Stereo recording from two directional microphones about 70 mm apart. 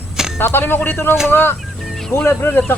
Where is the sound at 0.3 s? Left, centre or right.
Left.